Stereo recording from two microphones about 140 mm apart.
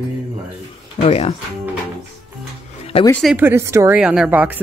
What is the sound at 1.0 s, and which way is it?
Speech, 45° left (ahead or behind).